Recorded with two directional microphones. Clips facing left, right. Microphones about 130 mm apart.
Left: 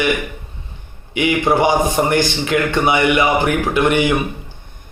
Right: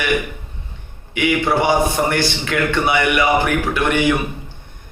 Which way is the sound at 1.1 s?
20° left (ahead or behind).